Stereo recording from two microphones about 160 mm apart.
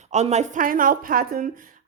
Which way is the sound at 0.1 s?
45° right (ahead or behind).